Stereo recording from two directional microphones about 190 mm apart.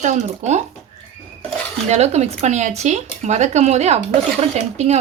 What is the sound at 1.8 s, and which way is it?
A woman's voice, 35° right (ahead or behind).